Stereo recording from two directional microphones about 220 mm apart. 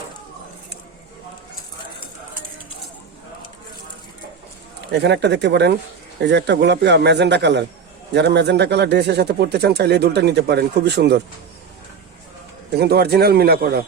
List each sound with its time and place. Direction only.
4.9 s a man's voice: 50° right (ahead or behind)
12.7 s a man's voice: 45° right (ahead or behind)